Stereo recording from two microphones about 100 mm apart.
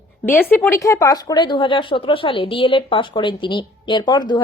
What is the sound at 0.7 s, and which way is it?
Speech, 35° left (ahead or behind).